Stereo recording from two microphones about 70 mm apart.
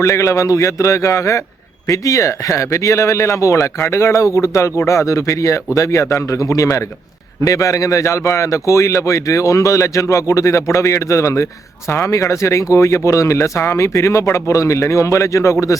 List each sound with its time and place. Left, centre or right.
0.0 s a man's voice: left
11.9 s speech: left
12.1 s a man's voice: left